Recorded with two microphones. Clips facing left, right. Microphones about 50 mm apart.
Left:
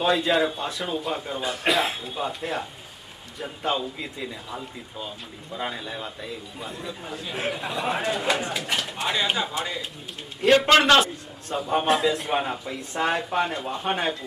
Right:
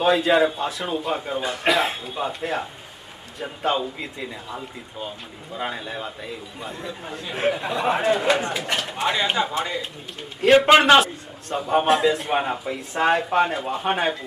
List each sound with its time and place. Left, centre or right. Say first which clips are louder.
0.0 s speech: right 4 dB; centre
3.6 s speech: right 3 dB; centre
10.5 s a man's voice: right 3 dB; centre
11.0 s speech: right 3 dB; centre